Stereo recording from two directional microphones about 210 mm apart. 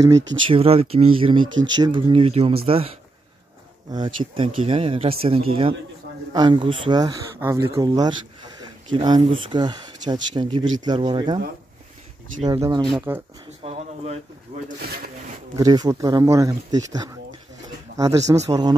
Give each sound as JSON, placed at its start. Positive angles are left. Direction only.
{"t": 0.5, "sound": "speech", "side_deg": -25}
{"t": 3.9, "sound": "speech", "side_deg": -20}
{"t": 12.4, "sound": "speech", "side_deg": -15}
{"t": 13.6, "sound": "speech", "side_deg": -30}
{"t": 14.8, "sound": "speech", "side_deg": -45}
{"t": 15.5, "sound": "speech", "side_deg": -20}